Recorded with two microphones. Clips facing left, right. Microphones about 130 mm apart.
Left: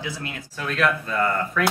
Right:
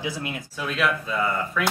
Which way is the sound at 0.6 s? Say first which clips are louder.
Left 2 dB; 5° right (ahead or behind).